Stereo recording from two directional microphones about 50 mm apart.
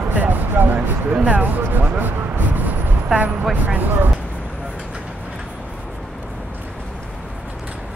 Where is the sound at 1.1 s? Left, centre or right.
Right.